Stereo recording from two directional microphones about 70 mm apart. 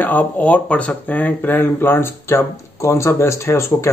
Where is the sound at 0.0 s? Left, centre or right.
Left.